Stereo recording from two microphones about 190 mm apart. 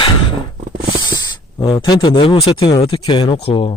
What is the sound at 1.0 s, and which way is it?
Speech, 20° left (ahead or behind).